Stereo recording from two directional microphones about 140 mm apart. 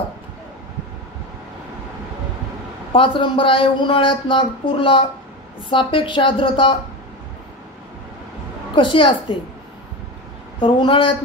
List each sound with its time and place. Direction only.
2.9 s speech: 40° left (ahead or behind)
8.7 s speech: 40° left (ahead or behind)
10.6 s speech: 40° left (ahead or behind)